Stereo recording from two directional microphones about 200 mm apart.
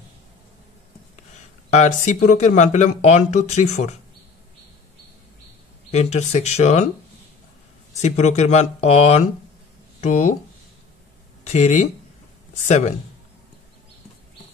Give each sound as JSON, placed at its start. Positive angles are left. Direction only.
{"t": 1.7, "sound": "speech", "side_deg": 35}
{"t": 5.9, "sound": "speech", "side_deg": 35}
{"t": 7.9, "sound": "speech", "side_deg": 35}
{"t": 11.4, "sound": "speech", "side_deg": 35}